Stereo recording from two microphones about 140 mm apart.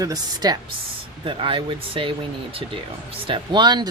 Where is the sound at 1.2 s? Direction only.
40° right (ahead or behind).